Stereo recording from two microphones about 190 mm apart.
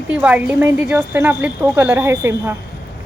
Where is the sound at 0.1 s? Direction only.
5° right (ahead or behind).